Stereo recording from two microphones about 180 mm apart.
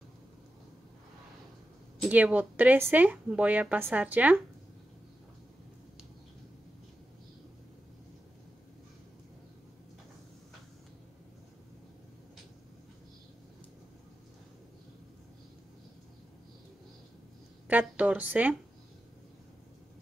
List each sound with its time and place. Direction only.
2.0 s speech: 5° right (ahead or behind)
17.6 s speech: 10° right (ahead or behind)